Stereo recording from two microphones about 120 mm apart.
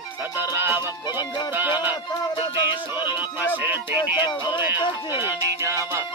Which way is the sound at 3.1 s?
15° right (ahead or behind).